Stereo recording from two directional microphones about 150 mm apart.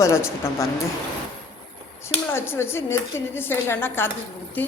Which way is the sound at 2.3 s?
15° left (ahead or behind).